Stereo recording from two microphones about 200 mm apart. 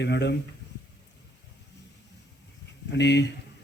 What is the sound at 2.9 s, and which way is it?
Speech, 60° left (ahead or behind).